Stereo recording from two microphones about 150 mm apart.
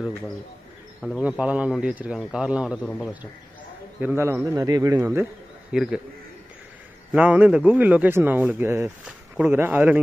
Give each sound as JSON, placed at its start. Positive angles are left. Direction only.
{"t": 1.2, "sound": "a man's voice", "side_deg": -10}
{"t": 4.0, "sound": "speech", "side_deg": -15}
{"t": 5.7, "sound": "a man's voice", "side_deg": -5}
{"t": 7.1, "sound": "a man's voice", "side_deg": -10}